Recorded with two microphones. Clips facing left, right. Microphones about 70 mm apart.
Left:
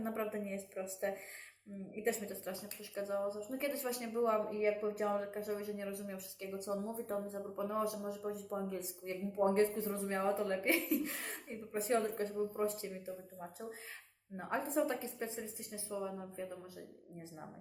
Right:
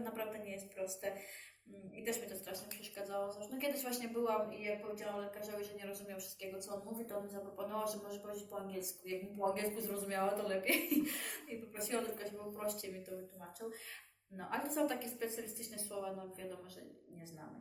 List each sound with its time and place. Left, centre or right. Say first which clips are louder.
0.0 s a woman's voice: left 4 dB; left
4.4 s a woman's voice: left 7 dB; left
14.3 s speech: left 3 dB; left